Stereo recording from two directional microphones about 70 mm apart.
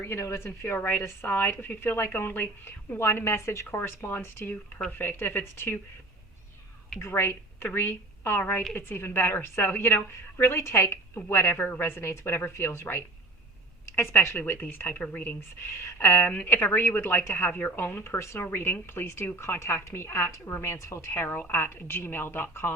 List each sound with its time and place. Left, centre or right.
0.0 s a woman's voice: left
7.0 s a woman's voice: left